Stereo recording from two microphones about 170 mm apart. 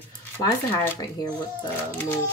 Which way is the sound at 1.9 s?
15° left (ahead or behind).